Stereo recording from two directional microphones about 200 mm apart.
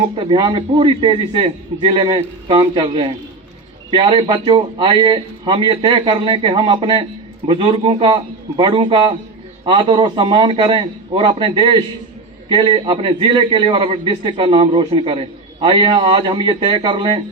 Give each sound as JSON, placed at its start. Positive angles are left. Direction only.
{"t": 0.2, "sound": "a man's voice", "side_deg": -25}